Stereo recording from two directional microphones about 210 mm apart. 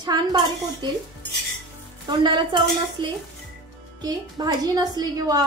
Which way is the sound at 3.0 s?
25° right (ahead or behind).